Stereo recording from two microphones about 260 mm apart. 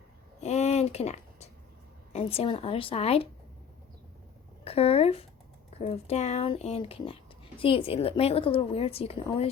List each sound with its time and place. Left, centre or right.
0.4 s a sound: left
2.1 s a woman's voice: left
4.6 s a woman's voice: left